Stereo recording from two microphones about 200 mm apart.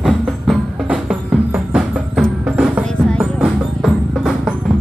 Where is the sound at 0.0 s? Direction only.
Centre (ahead or behind).